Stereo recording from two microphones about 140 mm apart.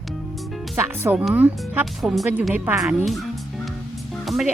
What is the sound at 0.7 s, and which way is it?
Speech, 15° right (ahead or behind).